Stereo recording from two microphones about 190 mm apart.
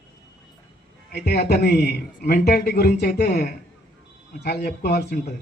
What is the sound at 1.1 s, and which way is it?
Speech, 55° left (ahead or behind).